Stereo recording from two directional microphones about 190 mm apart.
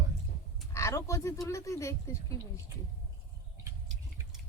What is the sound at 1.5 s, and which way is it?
Speech, 15° left (ahead or behind).